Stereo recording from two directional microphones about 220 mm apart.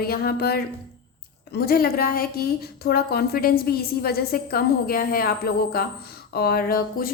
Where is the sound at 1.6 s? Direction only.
45° left (ahead or behind).